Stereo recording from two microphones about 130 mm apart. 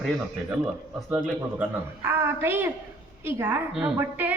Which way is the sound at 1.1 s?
10° right (ahead or behind).